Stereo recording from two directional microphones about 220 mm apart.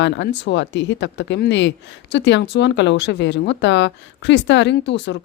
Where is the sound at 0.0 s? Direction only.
55° left (ahead or behind).